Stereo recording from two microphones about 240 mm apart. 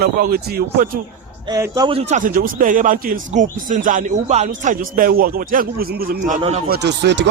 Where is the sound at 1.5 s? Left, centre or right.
Centre.